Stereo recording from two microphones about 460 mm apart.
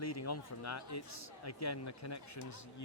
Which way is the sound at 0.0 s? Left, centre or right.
Left.